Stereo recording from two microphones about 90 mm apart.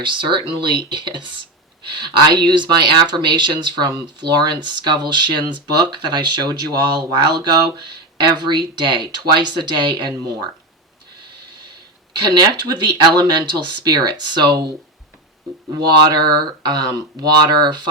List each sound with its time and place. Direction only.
0.0 s speech: 60° right (ahead or behind)
12.1 s speech: 50° right (ahead or behind)
16.0 s speech: 55° right (ahead or behind)